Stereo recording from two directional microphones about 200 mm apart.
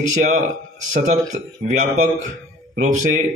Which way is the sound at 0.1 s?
40° right (ahead or behind).